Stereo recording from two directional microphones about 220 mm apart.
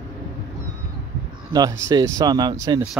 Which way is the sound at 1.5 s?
15° right (ahead or behind).